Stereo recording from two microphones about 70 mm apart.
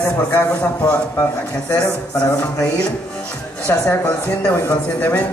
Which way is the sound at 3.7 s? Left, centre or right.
Left.